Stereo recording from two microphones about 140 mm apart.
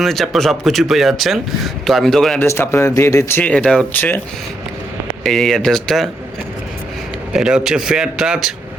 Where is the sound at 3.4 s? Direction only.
10° left (ahead or behind).